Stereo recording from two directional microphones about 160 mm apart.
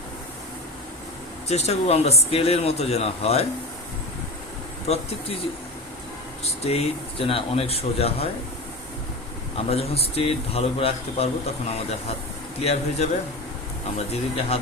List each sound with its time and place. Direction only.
1.5 s speech: 40° left (ahead or behind)
4.9 s speech: 40° left (ahead or behind)
6.4 s speech: 40° left (ahead or behind)
9.6 s speech: 40° left (ahead or behind)
14.1 s speech: 40° left (ahead or behind)